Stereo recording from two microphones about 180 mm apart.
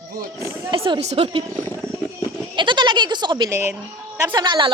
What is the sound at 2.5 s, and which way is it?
Goat, 25° right (ahead or behind).